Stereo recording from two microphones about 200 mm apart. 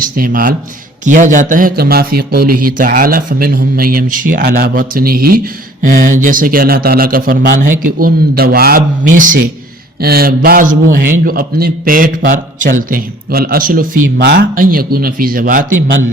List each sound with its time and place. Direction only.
0.0 s a man's voice: 45° right (ahead or behind)